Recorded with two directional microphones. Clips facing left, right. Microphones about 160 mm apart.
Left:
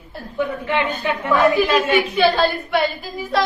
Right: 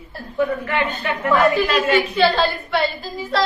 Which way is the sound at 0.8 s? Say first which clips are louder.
Even; 10° left (ahead or behind).